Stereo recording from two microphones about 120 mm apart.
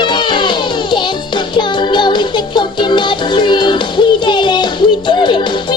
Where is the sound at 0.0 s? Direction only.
40° left (ahead or behind).